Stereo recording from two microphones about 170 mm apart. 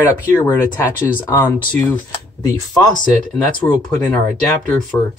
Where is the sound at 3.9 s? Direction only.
10° left (ahead or behind).